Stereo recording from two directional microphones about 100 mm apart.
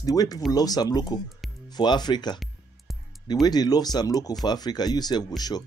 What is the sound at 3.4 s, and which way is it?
Speech, 40° left (ahead or behind).